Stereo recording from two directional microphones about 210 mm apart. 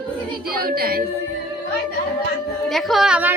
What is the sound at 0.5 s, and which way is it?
Music, 45° right (ahead or behind).